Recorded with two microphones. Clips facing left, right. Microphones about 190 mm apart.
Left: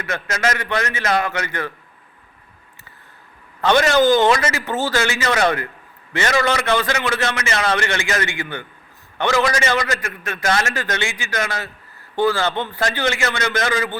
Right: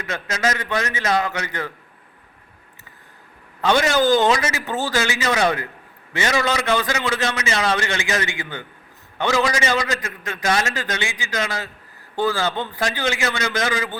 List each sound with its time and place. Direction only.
0.0 s a man's voice: 15° right (ahead or behind)
3.6 s a man's voice: 10° right (ahead or behind)